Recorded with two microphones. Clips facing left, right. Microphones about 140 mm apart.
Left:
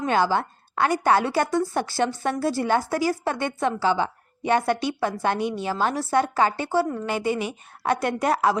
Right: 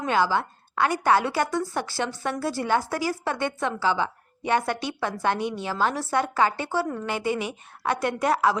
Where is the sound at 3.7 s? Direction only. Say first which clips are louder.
Left 4 dB; 20° left (ahead or behind).